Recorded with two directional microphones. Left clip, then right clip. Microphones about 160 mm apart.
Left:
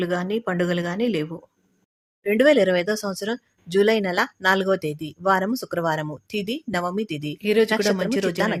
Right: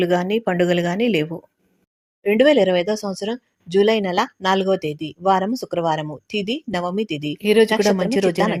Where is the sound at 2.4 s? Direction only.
Centre (ahead or behind).